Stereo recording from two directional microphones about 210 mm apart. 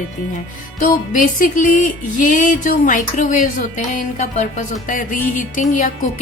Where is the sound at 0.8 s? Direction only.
40° left (ahead or behind).